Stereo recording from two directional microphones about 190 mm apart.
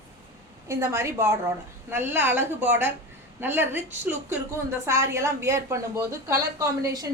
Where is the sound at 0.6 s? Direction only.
15° right (ahead or behind).